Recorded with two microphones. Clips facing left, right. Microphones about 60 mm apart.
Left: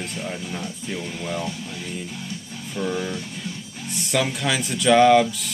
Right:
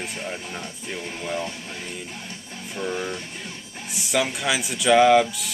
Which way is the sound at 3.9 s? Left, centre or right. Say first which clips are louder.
Even; centre.